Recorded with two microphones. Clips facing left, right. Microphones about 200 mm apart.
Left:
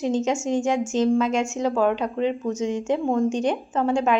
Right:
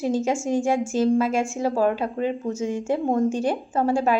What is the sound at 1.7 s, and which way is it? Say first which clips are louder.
Speech: even; 40° right (ahead or behind).